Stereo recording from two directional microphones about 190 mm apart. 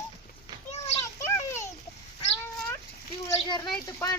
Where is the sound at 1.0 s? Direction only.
15° left (ahead or behind).